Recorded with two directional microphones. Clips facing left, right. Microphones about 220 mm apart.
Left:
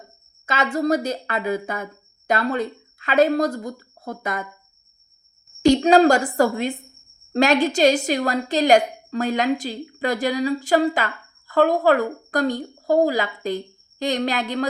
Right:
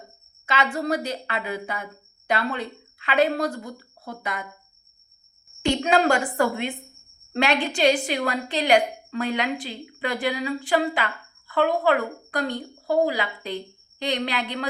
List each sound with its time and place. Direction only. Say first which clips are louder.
0.4 s a woman's voice: left 4 dB; 45° left (ahead or behind)
5.6 s a woman's voice: left 7 dB; 40° left (ahead or behind)